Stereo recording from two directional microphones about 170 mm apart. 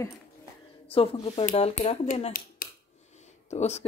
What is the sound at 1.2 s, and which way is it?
Speech, 35° left (ahead or behind).